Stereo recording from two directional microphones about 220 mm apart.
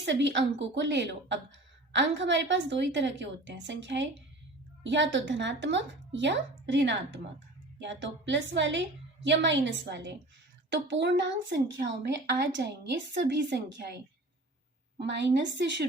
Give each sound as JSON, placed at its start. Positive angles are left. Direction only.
{"t": 0.0, "sound": "speech", "side_deg": -55}
{"t": 14.9, "sound": "a woman's voice", "side_deg": -50}